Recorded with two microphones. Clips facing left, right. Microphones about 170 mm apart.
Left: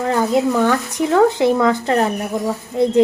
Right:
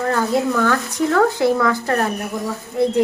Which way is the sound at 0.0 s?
20° left (ahead or behind).